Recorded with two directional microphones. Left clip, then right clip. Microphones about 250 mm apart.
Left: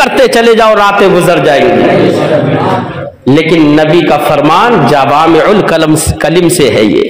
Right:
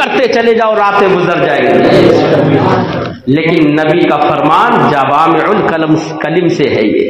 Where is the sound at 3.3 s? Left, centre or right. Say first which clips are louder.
Left 4 dB; left.